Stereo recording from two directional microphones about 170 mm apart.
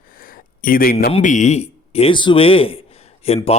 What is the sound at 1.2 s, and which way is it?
A man's voice, 45° left (ahead or behind).